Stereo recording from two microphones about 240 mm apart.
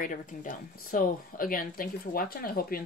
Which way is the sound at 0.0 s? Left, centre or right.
Left.